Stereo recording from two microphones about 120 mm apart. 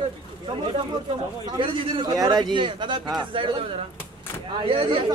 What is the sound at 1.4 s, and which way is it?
Speech, 40° right (ahead or behind).